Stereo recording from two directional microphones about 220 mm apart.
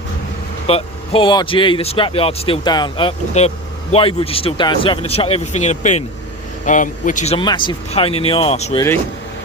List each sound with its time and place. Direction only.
0.7 s speech: 25° left (ahead or behind)
7.3 s speech: 20° left (ahead or behind)